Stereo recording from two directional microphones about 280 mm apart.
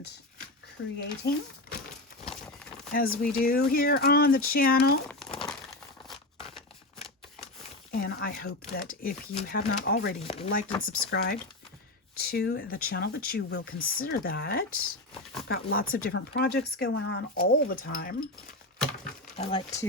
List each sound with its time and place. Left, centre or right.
0.8 s speech: left
2.9 s speech: left
5.0 s crumpling: centre
7.9 s a sound: left
8.7 s speech: left
10.2 s chopping: left
11.1 s speech: left
19.4 s speech: centre